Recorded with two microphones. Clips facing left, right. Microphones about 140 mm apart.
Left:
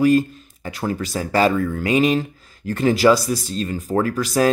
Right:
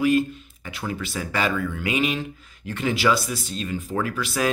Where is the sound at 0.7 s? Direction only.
40° left (ahead or behind).